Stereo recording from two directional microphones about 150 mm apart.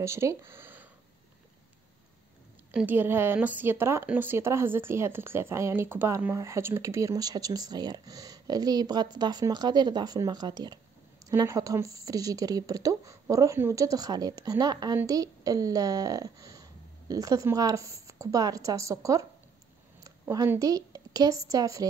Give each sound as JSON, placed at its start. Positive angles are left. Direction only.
{"t": 0.0, "sound": "speech", "side_deg": -20}
{"t": 2.7, "sound": "a woman's voice", "side_deg": -10}